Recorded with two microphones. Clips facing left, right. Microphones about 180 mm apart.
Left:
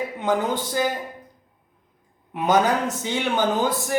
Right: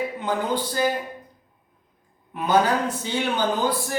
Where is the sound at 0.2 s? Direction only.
20° left (ahead or behind).